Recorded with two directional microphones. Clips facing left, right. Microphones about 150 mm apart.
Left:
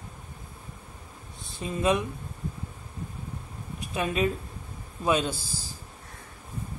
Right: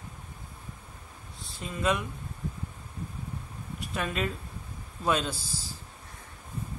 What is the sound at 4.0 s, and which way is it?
Speech, 15° left (ahead or behind).